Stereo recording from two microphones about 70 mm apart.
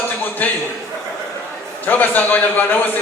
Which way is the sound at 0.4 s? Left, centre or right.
Left.